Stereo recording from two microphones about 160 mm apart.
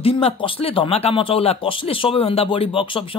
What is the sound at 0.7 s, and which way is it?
Speech, 40° left (ahead or behind).